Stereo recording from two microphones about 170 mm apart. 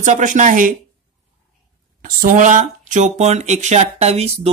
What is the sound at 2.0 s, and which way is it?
Speech, 50° right (ahead or behind).